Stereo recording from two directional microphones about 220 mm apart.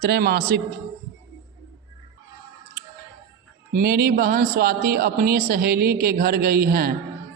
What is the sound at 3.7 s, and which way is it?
A man's voice, 45° right (ahead or behind).